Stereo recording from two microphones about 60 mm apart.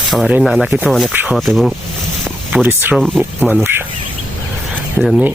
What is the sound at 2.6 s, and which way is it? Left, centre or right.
Speech, right.